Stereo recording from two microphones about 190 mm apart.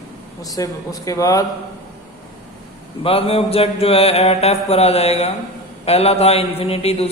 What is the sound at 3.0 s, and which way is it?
A man's voice, 30° left (ahead or behind).